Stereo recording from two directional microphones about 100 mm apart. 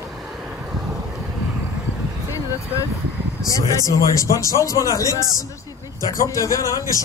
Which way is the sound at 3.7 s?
30° left (ahead or behind).